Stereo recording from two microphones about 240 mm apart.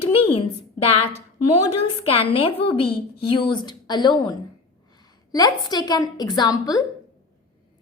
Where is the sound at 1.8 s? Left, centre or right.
Left.